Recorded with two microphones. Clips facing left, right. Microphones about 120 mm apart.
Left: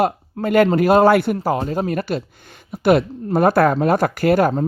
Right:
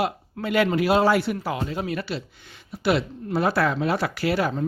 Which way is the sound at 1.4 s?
40° left (ahead or behind).